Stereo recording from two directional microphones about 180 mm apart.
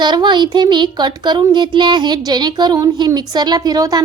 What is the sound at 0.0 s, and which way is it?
Speech, 25° right (ahead or behind).